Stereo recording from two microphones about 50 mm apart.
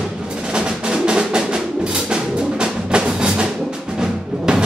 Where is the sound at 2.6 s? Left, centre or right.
Centre.